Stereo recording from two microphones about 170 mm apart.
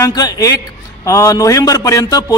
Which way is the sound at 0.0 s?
20° left (ahead or behind).